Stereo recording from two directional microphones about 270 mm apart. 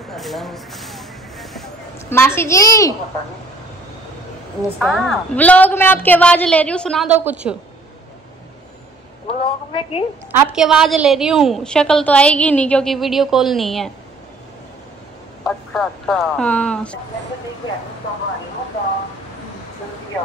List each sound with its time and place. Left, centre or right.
0.1 s a sound: centre
4.6 s a woman's voice: centre
9.3 s a woman's voice: left
10.3 s a woman's voice: centre
15.4 s a woman's voice: centre